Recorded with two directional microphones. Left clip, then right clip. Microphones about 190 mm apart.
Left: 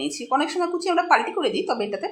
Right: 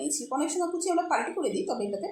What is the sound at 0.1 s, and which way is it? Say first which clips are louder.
Speech: left 8 dB; 10° left (ahead or behind).